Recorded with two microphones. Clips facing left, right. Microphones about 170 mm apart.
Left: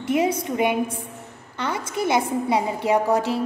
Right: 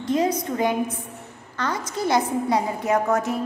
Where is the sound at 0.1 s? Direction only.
10° left (ahead or behind).